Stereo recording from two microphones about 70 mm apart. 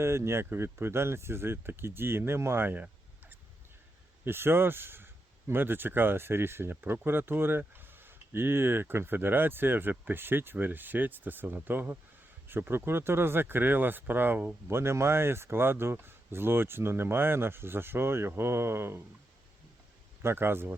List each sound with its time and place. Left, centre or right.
0.0 s speech: right
4.3 s speech: right
14.7 s speech: right
20.2 s speech: right